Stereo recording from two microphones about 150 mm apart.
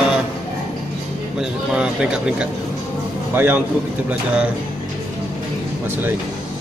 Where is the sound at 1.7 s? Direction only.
5° right (ahead or behind).